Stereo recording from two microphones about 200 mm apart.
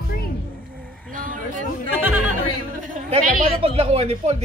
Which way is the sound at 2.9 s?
35° right (ahead or behind).